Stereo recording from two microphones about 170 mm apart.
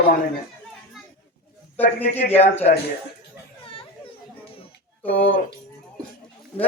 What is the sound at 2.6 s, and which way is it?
Speech, 60° left (ahead or behind).